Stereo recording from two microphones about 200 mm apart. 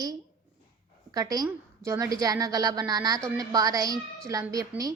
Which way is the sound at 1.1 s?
20° right (ahead or behind).